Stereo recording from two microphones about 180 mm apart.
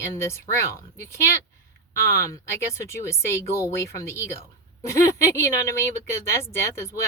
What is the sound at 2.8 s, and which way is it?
Speech, 15° left (ahead or behind).